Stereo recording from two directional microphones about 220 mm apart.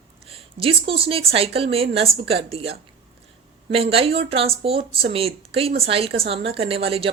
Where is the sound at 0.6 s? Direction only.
25° right (ahead or behind).